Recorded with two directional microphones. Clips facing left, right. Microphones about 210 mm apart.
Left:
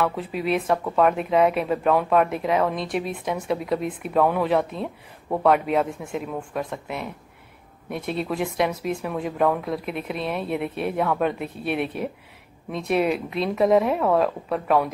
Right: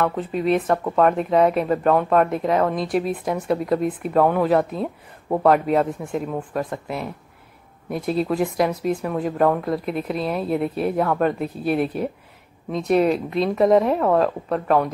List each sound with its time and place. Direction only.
0.0 s speech: 5° left (ahead or behind)